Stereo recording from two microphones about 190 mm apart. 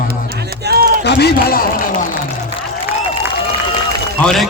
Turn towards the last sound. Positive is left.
turn(degrees=0)  # may be behind; listen again after turning